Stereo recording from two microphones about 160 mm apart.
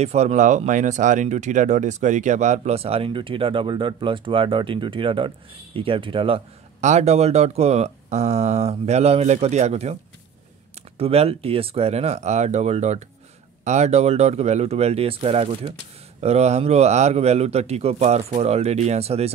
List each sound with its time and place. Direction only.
0.0 s speech: 45° right (ahead or behind)
6.8 s speech: 45° right (ahead or behind)
11.0 s speech: 40° right (ahead or behind)